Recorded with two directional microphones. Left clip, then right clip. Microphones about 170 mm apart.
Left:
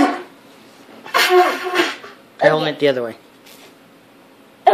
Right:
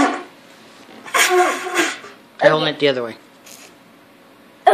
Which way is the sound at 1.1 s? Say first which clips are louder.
Left 2 dB; 20° left (ahead or behind).